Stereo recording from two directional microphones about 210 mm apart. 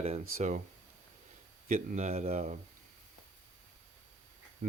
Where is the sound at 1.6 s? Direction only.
40° right (ahead or behind).